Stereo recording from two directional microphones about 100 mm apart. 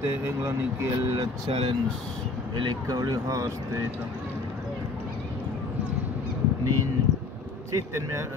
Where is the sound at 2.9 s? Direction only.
35° right (ahead or behind).